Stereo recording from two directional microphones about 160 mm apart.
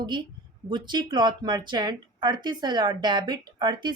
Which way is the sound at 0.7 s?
30° right (ahead or behind).